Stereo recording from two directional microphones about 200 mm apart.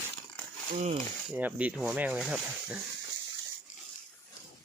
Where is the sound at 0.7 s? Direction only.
40° right (ahead or behind).